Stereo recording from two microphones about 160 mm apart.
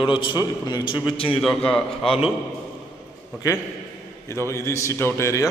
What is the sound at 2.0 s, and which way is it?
Speech, 35° left (ahead or behind).